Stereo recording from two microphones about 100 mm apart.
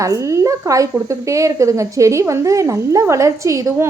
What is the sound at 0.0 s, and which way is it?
A woman's voice, 30° right (ahead or behind).